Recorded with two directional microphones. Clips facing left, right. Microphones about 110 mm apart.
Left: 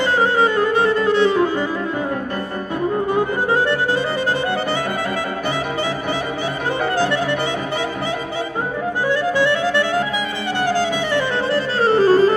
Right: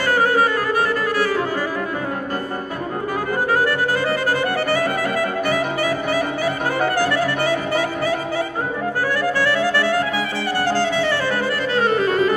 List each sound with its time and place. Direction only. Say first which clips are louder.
0.2 s saxophone: left 3 dB; 25° left (ahead or behind)
7.0 s music: even; 20° left (ahead or behind)
9.1 s music: left 3 dB; 20° left (ahead or behind)
11.5 s music: left 5 dB; 30° left (ahead or behind)